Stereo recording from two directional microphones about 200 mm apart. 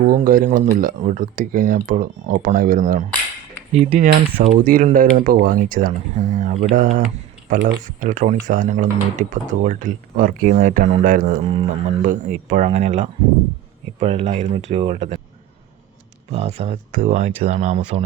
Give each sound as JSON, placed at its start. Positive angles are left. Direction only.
{"t": 0.2, "sound": "speech", "side_deg": -40}
{"t": 11.4, "sound": "speech", "side_deg": -30}
{"t": 12.0, "sound": "speech", "side_deg": -40}
{"t": 16.3, "sound": "speech", "side_deg": -30}